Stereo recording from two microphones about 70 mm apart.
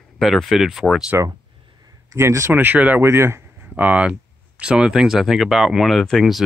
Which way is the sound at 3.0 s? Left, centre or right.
Right.